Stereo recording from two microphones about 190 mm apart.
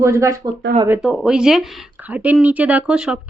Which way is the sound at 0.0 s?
15° right (ahead or behind).